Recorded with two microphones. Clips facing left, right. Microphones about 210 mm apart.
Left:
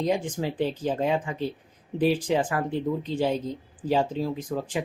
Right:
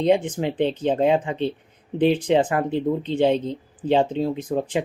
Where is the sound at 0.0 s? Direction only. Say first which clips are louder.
Right 6 dB; 20° right (ahead or behind).